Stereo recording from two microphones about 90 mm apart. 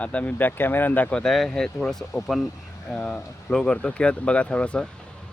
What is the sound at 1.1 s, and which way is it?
Speech, 5° left (ahead or behind).